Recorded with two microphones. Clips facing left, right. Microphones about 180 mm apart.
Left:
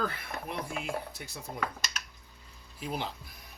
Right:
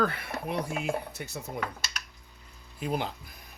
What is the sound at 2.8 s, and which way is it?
Speech, 55° right (ahead or behind).